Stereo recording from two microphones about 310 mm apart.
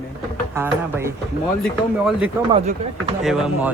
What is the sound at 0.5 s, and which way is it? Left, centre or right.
Speech, centre.